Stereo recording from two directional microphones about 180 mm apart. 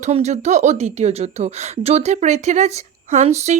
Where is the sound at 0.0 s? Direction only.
40° right (ahead or behind).